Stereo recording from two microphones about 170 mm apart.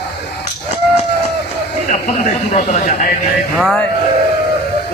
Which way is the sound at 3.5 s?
Centre (ahead or behind).